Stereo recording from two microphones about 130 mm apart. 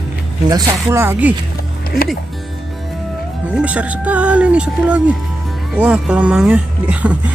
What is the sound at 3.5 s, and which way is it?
Speech, 10° right (ahead or behind).